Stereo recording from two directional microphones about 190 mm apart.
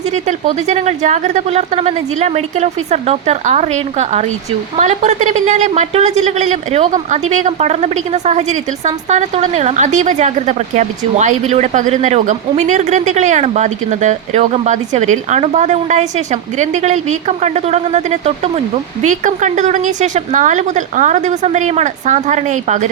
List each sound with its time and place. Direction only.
0.1 s a woman's voice: 40° right (ahead or behind)